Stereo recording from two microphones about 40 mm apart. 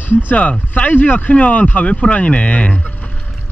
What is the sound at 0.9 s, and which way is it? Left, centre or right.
Speech, left.